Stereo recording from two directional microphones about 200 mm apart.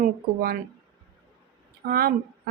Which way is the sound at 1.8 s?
50° right (ahead or behind).